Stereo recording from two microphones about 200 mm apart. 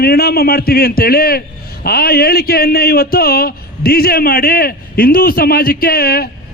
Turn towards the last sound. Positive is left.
turn(degrees=50)  # may be behind; listen again after turning